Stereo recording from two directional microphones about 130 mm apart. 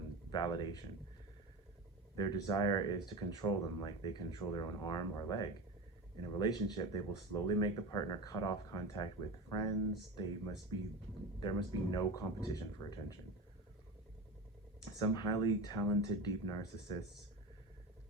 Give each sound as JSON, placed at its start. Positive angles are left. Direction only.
{"t": 0.3, "sound": "speech", "side_deg": 35}
{"t": 2.1, "sound": "speech", "side_deg": 30}
{"t": 11.3, "sound": "speech", "side_deg": 40}
{"t": 14.8, "sound": "speech", "side_deg": 35}